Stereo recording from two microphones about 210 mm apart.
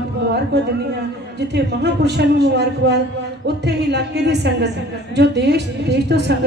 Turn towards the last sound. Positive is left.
turn(degrees=-55)  # may be behind; listen again after turning